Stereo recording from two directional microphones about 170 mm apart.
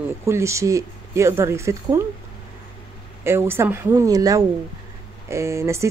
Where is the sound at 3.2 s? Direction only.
15° right (ahead or behind).